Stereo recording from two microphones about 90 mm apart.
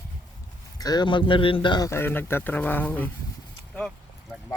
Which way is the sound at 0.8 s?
45° left (ahead or behind).